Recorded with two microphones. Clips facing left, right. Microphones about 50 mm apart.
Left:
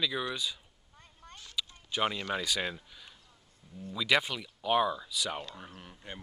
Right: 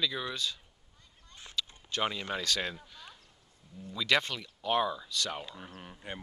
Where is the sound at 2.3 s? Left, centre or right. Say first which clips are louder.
Left 1 dB; centre.